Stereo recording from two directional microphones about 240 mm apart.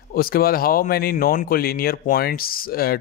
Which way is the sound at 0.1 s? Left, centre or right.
Left.